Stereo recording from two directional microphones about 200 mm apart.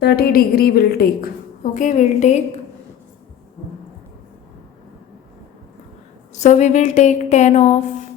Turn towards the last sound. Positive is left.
turn(degrees=35)  # may be behind; listen again after turning